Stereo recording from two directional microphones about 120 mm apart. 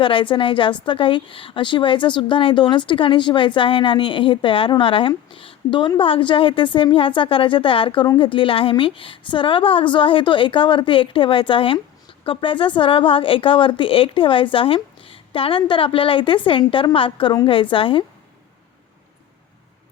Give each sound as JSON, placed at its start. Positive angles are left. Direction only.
{"t": 0.0, "sound": "a woman's voice", "side_deg": 45}